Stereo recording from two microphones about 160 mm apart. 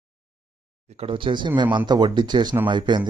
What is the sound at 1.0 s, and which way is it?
Speech, 30° right (ahead or behind).